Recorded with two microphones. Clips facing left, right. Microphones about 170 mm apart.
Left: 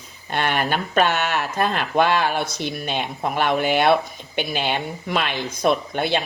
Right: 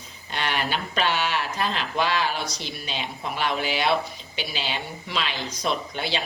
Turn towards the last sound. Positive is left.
turn(degrees=55)  # may be behind; listen again after turning